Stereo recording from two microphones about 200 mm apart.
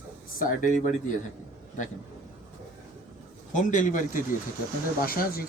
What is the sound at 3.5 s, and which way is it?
Speech, 40° left (ahead or behind).